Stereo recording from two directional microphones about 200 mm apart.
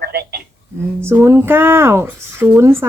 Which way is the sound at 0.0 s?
50° right (ahead or behind).